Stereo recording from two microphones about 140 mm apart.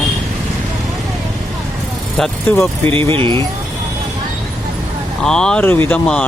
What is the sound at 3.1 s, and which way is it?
Speech, 40° right (ahead or behind).